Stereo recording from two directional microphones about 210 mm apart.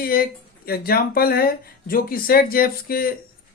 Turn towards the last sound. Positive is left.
turn(degrees=45)  # may be behind; listen again after turning